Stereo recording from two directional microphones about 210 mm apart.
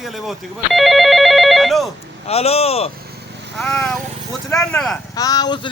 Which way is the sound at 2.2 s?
30° left (ahead or behind).